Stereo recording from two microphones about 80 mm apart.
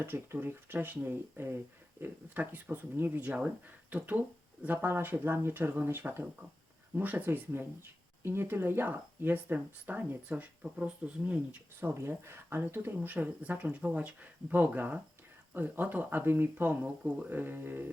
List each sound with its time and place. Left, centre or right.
0.0 s speech: right
11.9 s speech: right